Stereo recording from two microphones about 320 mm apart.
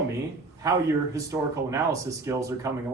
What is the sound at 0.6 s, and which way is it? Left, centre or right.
Speech, centre.